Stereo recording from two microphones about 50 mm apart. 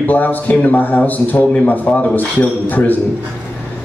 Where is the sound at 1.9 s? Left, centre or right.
Centre.